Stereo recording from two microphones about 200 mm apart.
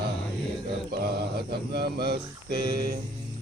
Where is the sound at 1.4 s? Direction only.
50° right (ahead or behind).